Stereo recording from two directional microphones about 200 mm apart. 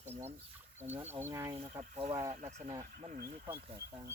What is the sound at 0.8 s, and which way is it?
Speech, 10° right (ahead or behind).